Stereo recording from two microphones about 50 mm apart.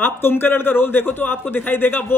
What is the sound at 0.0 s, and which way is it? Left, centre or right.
A man's voice, left.